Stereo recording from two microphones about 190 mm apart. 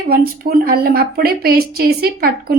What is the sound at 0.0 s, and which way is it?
Speech, 50° right (ahead or behind).